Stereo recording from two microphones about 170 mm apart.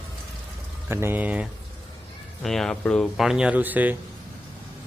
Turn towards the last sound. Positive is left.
turn(degrees=-10)  # may be behind; listen again after turning